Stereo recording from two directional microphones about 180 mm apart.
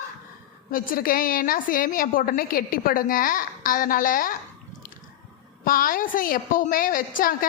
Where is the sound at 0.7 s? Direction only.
50° left (ahead or behind).